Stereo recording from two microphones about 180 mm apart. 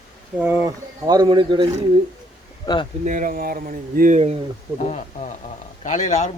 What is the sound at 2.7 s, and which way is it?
Speech, 20° left (ahead or behind).